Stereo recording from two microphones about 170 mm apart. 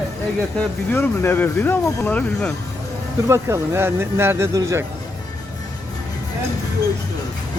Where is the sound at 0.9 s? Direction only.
15° left (ahead or behind).